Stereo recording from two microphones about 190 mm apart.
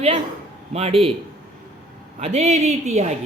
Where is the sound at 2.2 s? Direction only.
35° right (ahead or behind).